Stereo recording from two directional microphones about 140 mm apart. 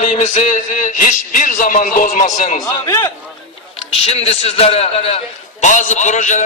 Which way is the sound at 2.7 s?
25° left (ahead or behind).